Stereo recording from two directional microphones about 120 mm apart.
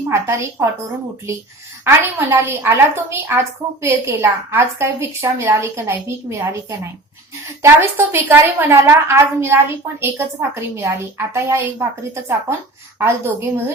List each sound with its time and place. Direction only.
0.1 s a woman's voice: 25° right (ahead or behind)
1.8 s a woman's voice: 20° right (ahead or behind)
13.0 s a woman's voice: 20° right (ahead or behind)